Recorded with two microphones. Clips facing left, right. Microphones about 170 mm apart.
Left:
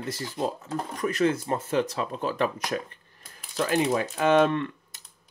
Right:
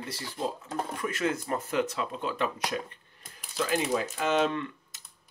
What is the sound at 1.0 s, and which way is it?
Speech, 35° left (ahead or behind).